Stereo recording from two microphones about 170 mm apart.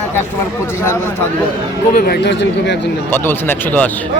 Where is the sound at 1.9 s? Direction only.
65° left (ahead or behind); by 2.8 s 90° left.